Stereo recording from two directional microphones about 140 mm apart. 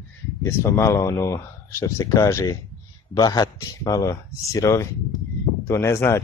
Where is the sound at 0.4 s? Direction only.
20° left (ahead or behind).